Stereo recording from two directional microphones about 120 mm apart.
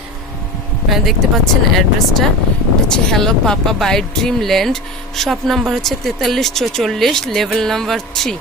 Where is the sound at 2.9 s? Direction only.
5° left (ahead or behind).